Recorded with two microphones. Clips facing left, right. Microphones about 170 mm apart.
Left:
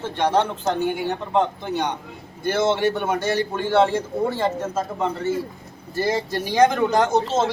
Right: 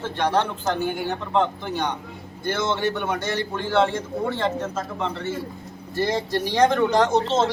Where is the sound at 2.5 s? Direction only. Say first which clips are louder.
Left 4 dB; 5° left (ahead or behind).